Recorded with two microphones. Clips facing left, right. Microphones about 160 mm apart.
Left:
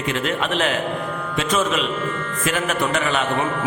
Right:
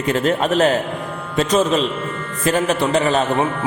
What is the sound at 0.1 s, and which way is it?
A man's voice, 40° right (ahead or behind).